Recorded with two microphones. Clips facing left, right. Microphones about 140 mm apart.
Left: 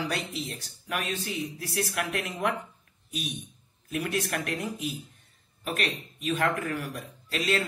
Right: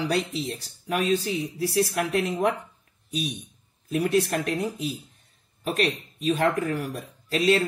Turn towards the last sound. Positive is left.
turn(degrees=-35)  # may be behind; listen again after turning